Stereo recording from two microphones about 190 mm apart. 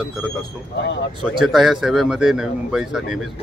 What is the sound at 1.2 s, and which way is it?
Speech, centre (ahead or behind).